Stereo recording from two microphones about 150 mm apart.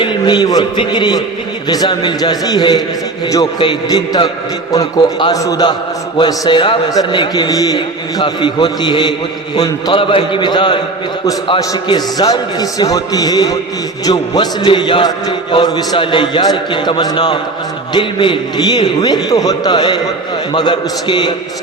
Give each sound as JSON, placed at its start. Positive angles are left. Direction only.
{"t": 0.0, "sound": "a man's voice", "side_deg": 30}